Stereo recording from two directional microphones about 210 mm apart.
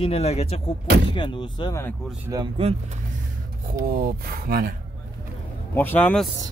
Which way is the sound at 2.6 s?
30° right (ahead or behind).